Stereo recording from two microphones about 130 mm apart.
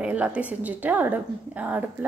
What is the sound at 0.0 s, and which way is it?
A woman's voice, 10° right (ahead or behind).